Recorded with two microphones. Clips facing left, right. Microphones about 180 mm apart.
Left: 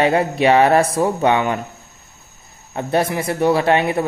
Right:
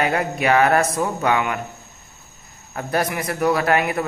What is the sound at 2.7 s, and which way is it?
Speech, 25° left (ahead or behind).